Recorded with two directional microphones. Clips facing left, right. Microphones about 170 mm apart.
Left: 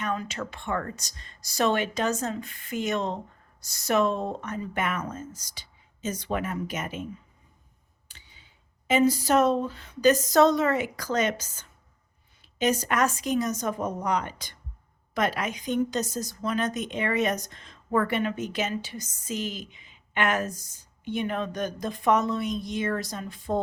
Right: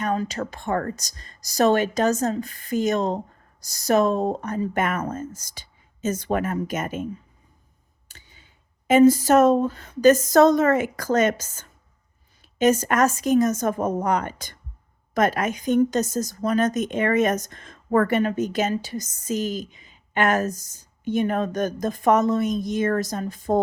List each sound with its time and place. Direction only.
0.0 s a woman's voice: 35° right (ahead or behind)